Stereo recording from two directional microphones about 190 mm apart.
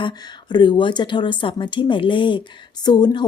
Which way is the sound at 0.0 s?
25° left (ahead or behind).